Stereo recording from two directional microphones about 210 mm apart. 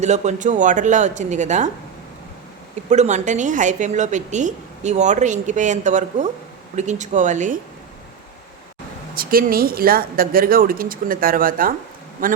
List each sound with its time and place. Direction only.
0.0 s a woman's voice: 35° right (ahead or behind)
2.9 s a woman's voice: 35° right (ahead or behind)
9.1 s speech: 45° right (ahead or behind)